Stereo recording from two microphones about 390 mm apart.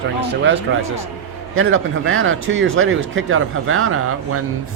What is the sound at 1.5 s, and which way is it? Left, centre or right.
Speech, right.